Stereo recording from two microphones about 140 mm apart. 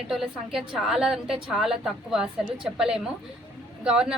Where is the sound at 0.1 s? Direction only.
5° right (ahead or behind).